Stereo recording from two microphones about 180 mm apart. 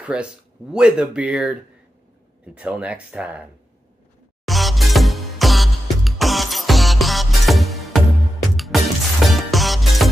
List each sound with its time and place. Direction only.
0.0 s speech: 5° right (ahead or behind)
4.5 s music: centre (ahead or behind)